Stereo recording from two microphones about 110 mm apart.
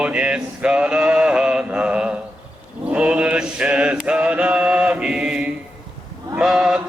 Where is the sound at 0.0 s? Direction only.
10° right (ahead or behind).